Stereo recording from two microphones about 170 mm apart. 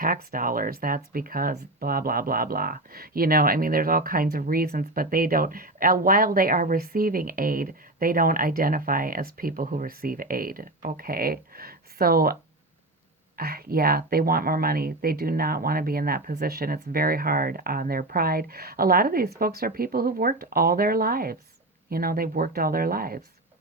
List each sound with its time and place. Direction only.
0.0 s speech: 60° right (ahead or behind)